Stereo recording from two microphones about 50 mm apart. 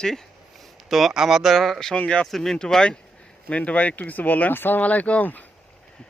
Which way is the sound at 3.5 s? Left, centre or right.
Left.